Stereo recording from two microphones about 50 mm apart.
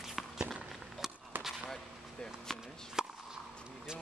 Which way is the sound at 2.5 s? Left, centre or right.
Centre.